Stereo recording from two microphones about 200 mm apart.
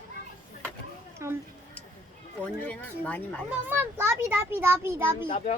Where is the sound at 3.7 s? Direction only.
10° right (ahead or behind).